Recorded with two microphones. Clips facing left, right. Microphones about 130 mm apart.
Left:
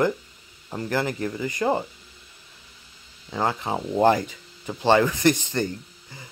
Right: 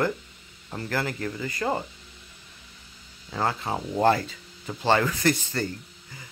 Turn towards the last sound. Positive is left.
turn(degrees=20)  # may be behind; listen again after turning